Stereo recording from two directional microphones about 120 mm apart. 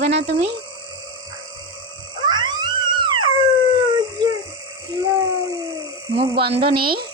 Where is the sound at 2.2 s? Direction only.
40° right (ahead or behind).